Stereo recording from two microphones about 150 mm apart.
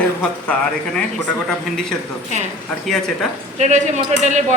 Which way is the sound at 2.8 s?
Centre (ahead or behind).